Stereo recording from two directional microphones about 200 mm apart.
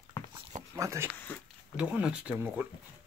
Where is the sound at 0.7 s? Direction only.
15° right (ahead or behind).